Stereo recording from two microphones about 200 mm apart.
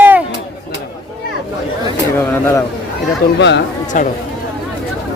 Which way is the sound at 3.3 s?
60° left (ahead or behind).